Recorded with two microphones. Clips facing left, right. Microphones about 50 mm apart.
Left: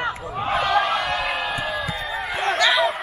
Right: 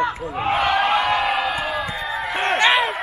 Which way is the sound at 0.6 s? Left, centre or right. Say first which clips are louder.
Right 2 dB; centre.